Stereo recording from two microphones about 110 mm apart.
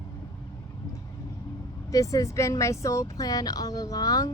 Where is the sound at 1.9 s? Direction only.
30° left (ahead or behind).